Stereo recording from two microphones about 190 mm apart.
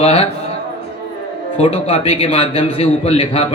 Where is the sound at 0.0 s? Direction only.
30° left (ahead or behind).